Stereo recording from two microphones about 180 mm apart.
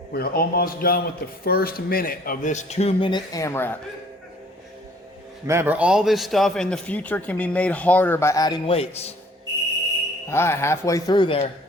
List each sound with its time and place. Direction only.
0.1 s a man's voice: 60° left (ahead or behind); by 3.8 s 15° left (ahead or behind)
5.5 s a man's voice: 10° right (ahead or behind); by 9.1 s 35° left (ahead or behind)
10.2 s a man's voice: 15° left (ahead or behind)